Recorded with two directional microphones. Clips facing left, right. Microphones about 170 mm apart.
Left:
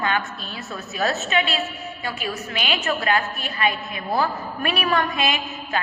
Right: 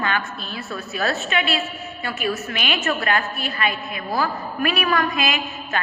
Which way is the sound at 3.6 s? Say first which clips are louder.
Left 3 dB; 25° left (ahead or behind).